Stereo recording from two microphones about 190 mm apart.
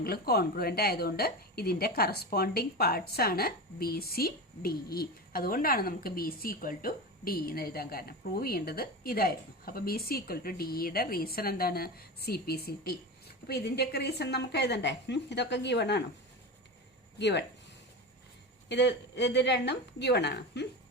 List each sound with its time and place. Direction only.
0.0 s a woman's voice: 55° left (ahead or behind)
17.2 s a woman's voice: 65° left (ahead or behind)
18.7 s a woman's voice: 65° left (ahead or behind)